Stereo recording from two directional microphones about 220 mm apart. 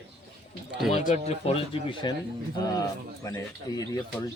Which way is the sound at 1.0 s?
30° left (ahead or behind).